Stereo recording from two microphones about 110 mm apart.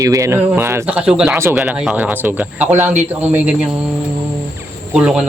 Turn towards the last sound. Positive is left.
turn(degrees=-5)  # may be behind; listen again after turning